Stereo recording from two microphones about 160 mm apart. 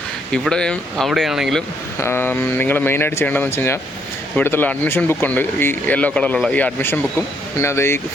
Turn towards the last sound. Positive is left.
turn(degrees=15)  # may be behind; listen again after turning